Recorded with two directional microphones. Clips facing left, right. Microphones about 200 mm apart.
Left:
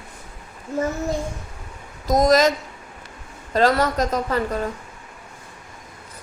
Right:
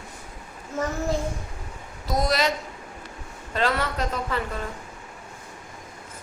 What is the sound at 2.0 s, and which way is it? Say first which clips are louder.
Speech: left 8 dB; 45° left (ahead or behind).